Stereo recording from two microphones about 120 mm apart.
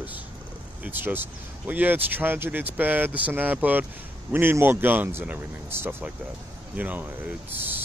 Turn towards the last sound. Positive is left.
turn(degrees=-15)  # may be behind; listen again after turning